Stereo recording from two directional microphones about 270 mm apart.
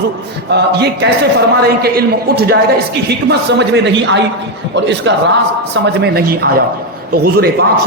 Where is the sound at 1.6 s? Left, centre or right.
Right.